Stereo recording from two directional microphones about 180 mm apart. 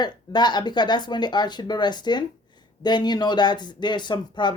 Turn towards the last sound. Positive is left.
turn(degrees=25)  # may be behind; listen again after turning